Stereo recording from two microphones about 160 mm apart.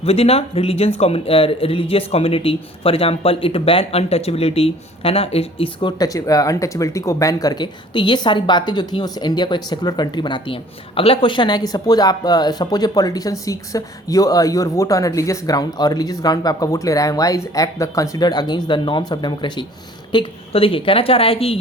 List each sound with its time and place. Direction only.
0.0 s a woman's voice: 40° left (ahead or behind)